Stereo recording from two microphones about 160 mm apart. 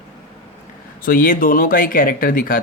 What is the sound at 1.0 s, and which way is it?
A man's voice, 60° left (ahead or behind).